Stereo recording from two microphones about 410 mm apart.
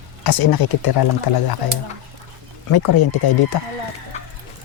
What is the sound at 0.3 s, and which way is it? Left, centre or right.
Speech, left.